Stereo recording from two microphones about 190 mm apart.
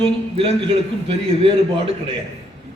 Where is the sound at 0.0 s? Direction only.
30° right (ahead or behind).